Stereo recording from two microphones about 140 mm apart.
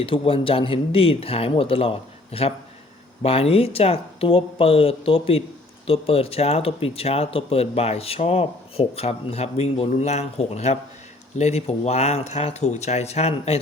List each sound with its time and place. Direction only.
0.0 s speech: 40° left (ahead or behind)